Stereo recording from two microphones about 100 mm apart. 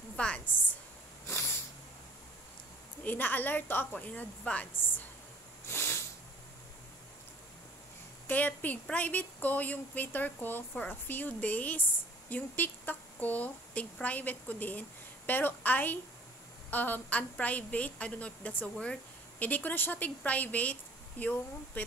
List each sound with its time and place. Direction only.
0.1 s a woman's voice: 10° left (ahead or behind)
1.2 s snort: 25° left (ahead or behind)
3.0 s speech: 20° left (ahead or behind)
5.7 s snort: 25° left (ahead or behind)
8.3 s speech: 15° left (ahead or behind)